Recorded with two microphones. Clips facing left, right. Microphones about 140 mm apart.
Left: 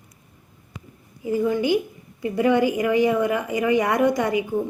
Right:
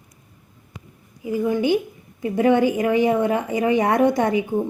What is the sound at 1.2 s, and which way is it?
A woman's voice, 15° right (ahead or behind).